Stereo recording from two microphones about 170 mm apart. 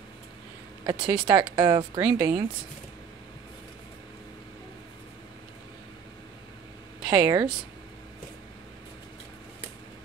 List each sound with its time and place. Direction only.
0.8 s speech: 25° right (ahead or behind)
7.1 s speech: 20° right (ahead or behind)